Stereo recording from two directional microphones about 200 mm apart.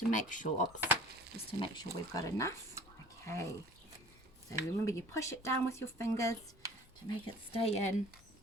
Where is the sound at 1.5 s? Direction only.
20° left (ahead or behind).